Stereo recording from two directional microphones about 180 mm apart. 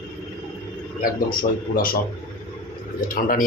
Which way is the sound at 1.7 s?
55° left (ahead or behind).